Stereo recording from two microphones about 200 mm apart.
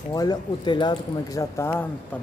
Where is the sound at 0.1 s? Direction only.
20° left (ahead or behind).